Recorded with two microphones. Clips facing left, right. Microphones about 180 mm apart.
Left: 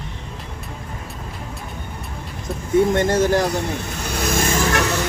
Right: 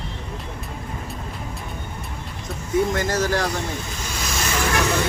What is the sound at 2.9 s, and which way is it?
Speech, 25° left (ahead or behind).